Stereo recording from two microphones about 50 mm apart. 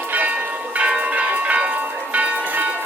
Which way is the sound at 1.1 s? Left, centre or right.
Right.